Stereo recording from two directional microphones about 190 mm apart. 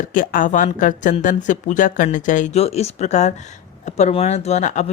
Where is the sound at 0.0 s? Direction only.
45° left (ahead or behind).